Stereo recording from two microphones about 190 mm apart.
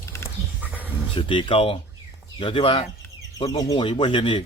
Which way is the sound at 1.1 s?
25° left (ahead or behind).